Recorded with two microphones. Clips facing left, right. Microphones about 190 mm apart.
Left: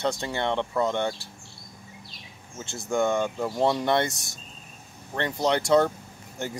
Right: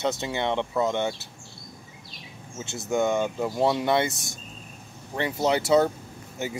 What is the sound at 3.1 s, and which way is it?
Speech, 5° right (ahead or behind).